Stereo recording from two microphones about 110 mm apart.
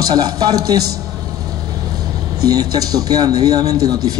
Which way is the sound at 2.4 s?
35° right (ahead or behind).